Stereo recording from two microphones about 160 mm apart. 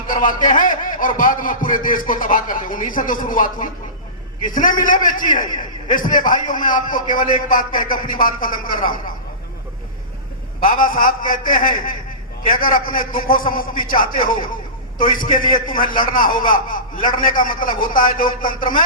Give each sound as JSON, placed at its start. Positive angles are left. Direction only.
{"t": 0.2, "sound": "a man's voice", "side_deg": 55}
{"t": 10.6, "sound": "a man's voice", "side_deg": 60}
{"t": 13.9, "sound": "a man's voice", "side_deg": 30}
{"t": 15.2, "sound": "a man's voice", "side_deg": 60}
{"t": 18.3, "sound": "a man's voice", "side_deg": 30}